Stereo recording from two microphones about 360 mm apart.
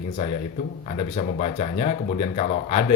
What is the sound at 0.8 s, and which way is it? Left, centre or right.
Speech, centre.